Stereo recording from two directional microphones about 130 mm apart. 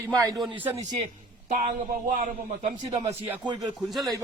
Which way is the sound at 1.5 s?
65° right (ahead or behind).